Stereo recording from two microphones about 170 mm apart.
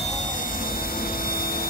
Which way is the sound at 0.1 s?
45° left (ahead or behind).